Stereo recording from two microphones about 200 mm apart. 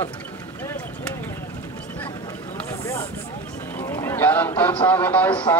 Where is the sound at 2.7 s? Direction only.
15° left (ahead or behind).